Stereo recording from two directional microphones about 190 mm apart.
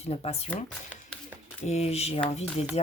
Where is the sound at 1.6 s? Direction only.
35° left (ahead or behind).